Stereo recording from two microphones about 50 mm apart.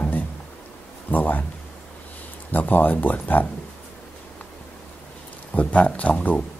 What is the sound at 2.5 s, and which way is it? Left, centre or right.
Speech, left.